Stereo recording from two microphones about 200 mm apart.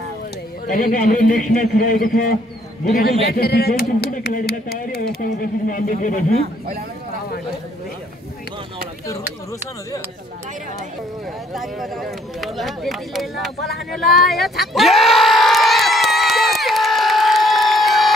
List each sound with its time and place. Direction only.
0.7 s a man's voice: 45° left (ahead or behind)
11.5 s speech: centre (ahead or behind)
14.7 s a sound: centre (ahead or behind)